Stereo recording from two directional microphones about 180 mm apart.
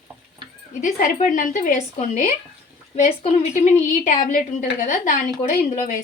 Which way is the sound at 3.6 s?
45° left (ahead or behind).